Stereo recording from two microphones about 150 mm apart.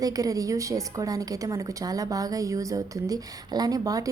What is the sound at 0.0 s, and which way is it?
A woman's voice, 25° right (ahead or behind).